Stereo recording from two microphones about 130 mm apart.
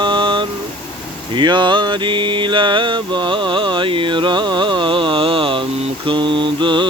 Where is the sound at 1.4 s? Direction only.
35° right (ahead or behind).